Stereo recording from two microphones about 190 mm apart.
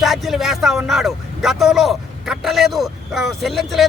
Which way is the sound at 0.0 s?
Centre (ahead or behind).